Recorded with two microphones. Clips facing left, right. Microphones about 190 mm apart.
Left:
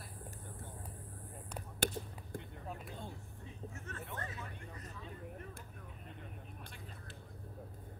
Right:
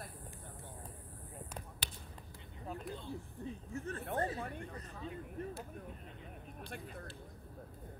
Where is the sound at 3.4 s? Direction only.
35° right (ahead or behind).